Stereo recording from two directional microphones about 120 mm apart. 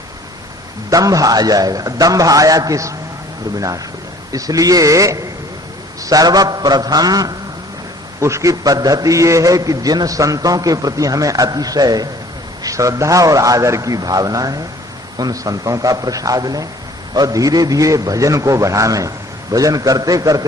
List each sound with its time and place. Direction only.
0.9 s a man's voice: 30° right (ahead or behind)
4.3 s a man's voice: 30° right (ahead or behind)